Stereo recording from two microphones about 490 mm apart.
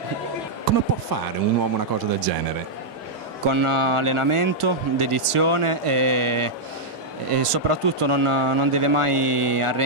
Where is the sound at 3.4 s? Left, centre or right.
Right.